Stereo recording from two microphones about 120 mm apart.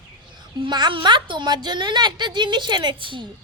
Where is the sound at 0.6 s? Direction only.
40° right (ahead or behind).